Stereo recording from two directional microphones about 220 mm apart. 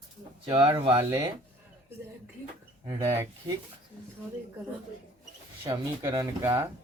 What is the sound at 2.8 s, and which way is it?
Speech, 15° right (ahead or behind).